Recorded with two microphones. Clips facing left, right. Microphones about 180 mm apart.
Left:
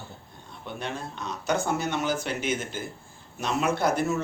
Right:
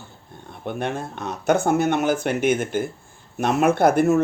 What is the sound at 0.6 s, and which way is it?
Speech, 55° right (ahead or behind).